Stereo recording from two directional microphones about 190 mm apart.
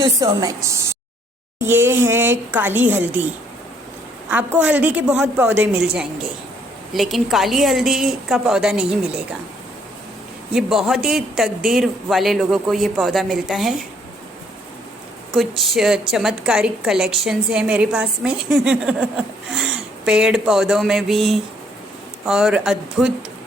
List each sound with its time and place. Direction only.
0.0 s a woman's voice: 15° right (ahead or behind)
4.3 s a woman's voice: 5° right (ahead or behind)
10.5 s a woman's voice: centre (ahead or behind)
15.3 s a woman's voice: centre (ahead or behind)